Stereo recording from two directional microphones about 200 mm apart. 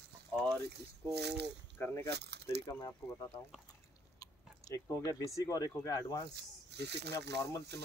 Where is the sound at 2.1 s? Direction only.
55° right (ahead or behind).